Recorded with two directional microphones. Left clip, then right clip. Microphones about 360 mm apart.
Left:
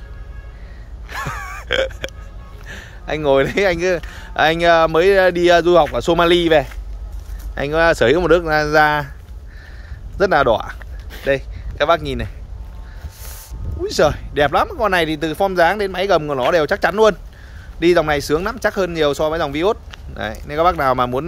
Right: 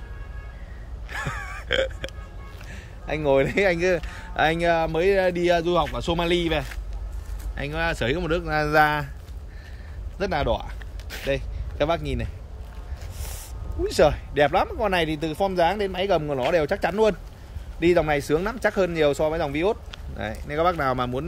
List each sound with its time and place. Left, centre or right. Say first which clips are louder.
1.1 s burping: left 5 dB; centre
2.7 s speech: left 6 dB; centre
10.1 s speech: left 11 dB; centre
13.8 s speech: left 4 dB; centre